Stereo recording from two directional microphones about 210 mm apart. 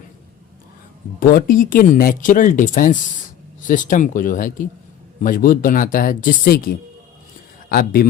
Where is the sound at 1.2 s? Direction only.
45° left (ahead or behind).